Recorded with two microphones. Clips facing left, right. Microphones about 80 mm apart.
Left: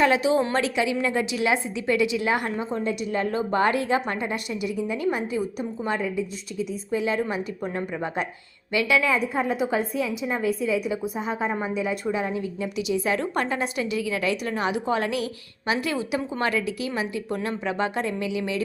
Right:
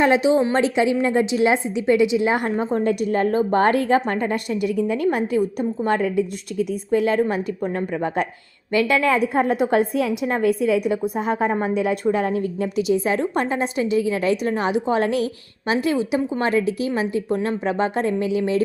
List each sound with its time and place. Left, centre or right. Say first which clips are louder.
0.0 s a woman's voice: right 4 dB; right
0.6 s a woman's voice: right 5 dB; right
2.7 s a woman's voice: right 7 dB; right
12.6 s a woman's voice: right 4 dB; right